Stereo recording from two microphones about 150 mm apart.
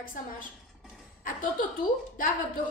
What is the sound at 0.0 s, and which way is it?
A woman's voice, 65° left (ahead or behind).